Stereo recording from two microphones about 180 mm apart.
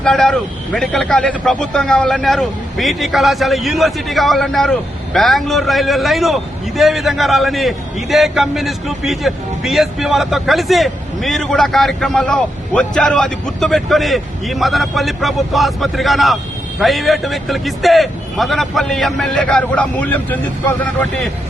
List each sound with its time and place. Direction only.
0.0 s a man's voice: centre (ahead or behind)